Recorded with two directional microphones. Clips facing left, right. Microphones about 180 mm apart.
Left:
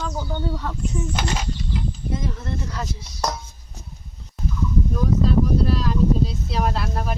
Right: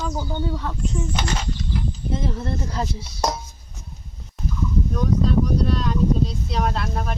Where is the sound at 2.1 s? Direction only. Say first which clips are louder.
Right 3 dB; 30° right (ahead or behind).